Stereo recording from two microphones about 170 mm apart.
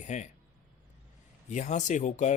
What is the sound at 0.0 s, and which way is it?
Speech, 45° left (ahead or behind).